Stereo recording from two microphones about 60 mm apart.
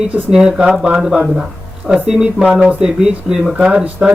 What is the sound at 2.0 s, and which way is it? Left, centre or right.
Speech, centre.